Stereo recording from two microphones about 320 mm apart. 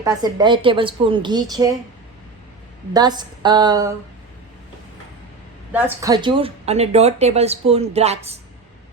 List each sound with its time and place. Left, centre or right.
0.0 s a woman's voice: centre
2.9 s a woman's voice: centre
5.7 s a woman's voice: centre